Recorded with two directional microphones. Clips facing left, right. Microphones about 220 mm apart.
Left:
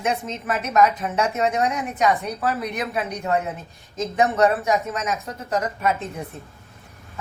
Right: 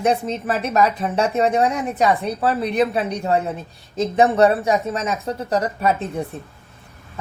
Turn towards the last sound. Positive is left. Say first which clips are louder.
# right 3 dB
turn(degrees=-35)  # may be behind; listen again after turning